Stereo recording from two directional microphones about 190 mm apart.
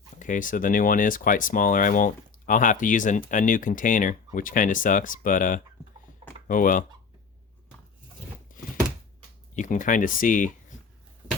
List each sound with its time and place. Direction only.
0.2 s speech: 45° left (ahead or behind)
8.5 s a sound: 45° left (ahead or behind)
9.6 s speech: 40° left (ahead or behind)